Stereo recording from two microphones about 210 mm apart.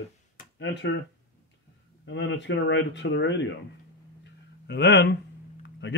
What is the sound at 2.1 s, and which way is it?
Speech, 60° left (ahead or behind).